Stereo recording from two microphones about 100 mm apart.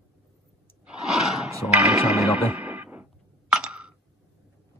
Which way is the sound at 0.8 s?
5° right (ahead or behind).